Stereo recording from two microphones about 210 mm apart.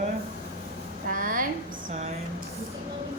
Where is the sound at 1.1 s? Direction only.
40° right (ahead or behind).